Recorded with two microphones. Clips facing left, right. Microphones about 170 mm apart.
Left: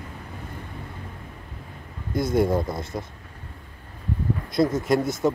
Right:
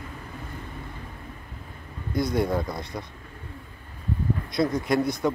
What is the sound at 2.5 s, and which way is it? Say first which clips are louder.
Speech: left 3 dB; 20° left (ahead or behind).